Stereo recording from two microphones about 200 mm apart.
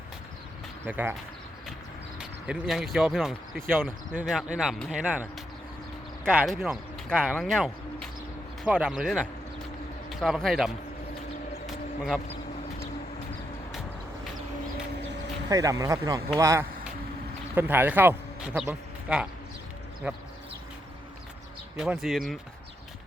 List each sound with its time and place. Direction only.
0.9 s speech: 10° right (ahead or behind)
2.1 s speech: 5° right (ahead or behind)
11.6 s a sound: centre (ahead or behind)
15.4 s speech: 15° right (ahead or behind)
16.4 s a sound: 15° right (ahead or behind)
17.5 s speech: 10° right (ahead or behind)
21.8 s speech: centre (ahead or behind)